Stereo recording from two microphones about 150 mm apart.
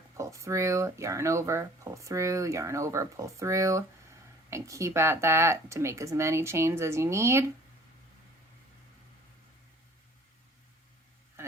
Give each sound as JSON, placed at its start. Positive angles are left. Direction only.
{"t": 0.2, "sound": "speech", "side_deg": -20}
{"t": 11.4, "sound": "vehicle", "side_deg": -20}